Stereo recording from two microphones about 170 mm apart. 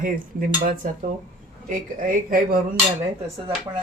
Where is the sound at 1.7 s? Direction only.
55° right (ahead or behind).